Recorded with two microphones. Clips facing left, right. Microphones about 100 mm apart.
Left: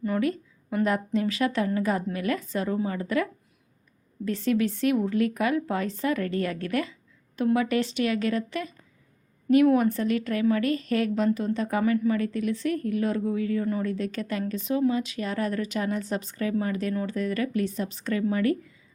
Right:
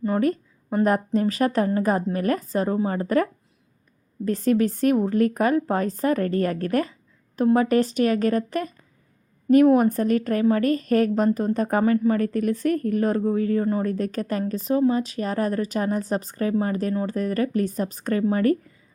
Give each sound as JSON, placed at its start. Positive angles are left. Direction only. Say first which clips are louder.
{"t": 0.0, "sound": "a woman's voice", "louder": "right 4 dB", "side_deg": -40}
{"t": 4.3, "sound": "a woman's voice", "louder": "right 4 dB", "side_deg": -40}